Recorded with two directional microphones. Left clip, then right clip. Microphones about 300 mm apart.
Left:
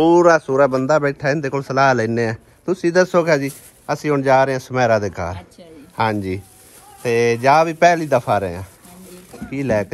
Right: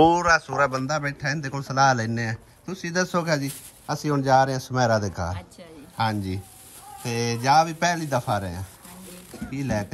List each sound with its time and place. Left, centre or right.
0.0 s speech: centre
0.7 s a man's voice: centre
3.9 s speech: centre
7.1 s speech: centre
7.3 s a man's voice: centre